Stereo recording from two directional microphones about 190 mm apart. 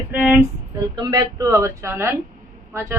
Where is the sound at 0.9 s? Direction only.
20° right (ahead or behind).